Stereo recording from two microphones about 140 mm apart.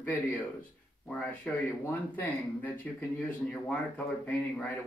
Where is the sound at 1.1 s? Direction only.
10° left (ahead or behind).